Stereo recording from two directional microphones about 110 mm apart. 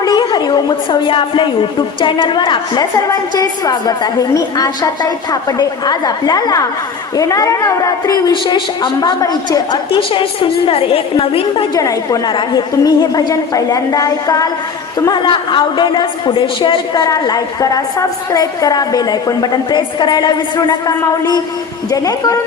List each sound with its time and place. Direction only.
0.0 s a woman's voice: 40° left (ahead or behind)
8.3 s a woman's voice: 50° left (ahead or behind)
10.1 s a woman's voice: 50° left (ahead or behind)
11.7 s a woman's voice: 30° left (ahead or behind)